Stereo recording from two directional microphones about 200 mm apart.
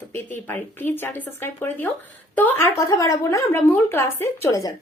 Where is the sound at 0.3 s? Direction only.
10° left (ahead or behind).